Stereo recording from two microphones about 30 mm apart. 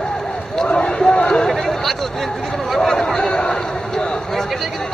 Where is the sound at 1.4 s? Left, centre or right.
Centre.